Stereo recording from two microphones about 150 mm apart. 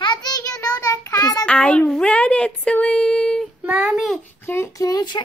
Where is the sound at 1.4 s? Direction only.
5° left (ahead or behind).